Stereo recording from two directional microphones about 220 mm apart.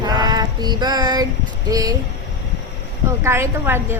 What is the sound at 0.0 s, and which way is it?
Female singing, 20° right (ahead or behind).